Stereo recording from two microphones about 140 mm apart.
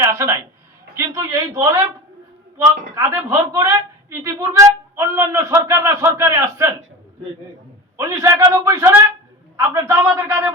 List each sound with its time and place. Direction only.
0.0 s a woman's voice: 20° right (ahead or behind)
2.9 s a woman's voice: 20° right (ahead or behind)
7.9 s a woman's voice: 20° right (ahead or behind)